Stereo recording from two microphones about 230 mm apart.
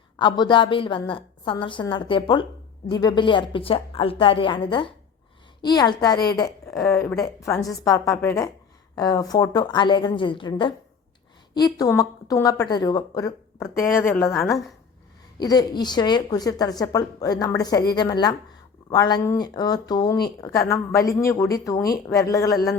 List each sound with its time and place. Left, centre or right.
0.2 s a woman's voice: centre